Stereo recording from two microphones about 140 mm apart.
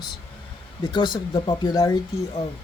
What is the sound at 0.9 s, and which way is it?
Speech, 30° left (ahead or behind).